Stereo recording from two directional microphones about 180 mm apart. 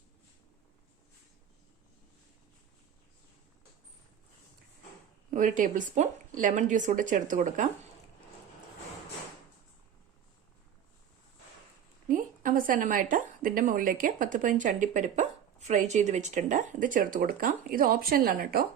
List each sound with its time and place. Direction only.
5.3 s a woman's voice: 45° right (ahead or behind)
12.0 s a woman's voice: 50° right (ahead or behind)